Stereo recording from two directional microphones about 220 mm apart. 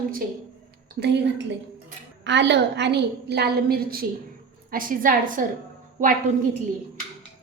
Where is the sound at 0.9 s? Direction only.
50° right (ahead or behind); by 6.1 s 35° right (ahead or behind).